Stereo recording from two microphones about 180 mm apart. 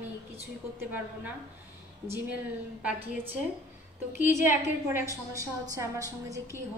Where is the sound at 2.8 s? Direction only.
10° right (ahead or behind).